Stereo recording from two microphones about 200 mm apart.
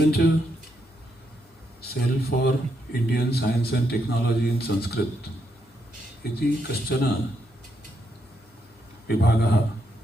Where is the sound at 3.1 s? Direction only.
55° left (ahead or behind).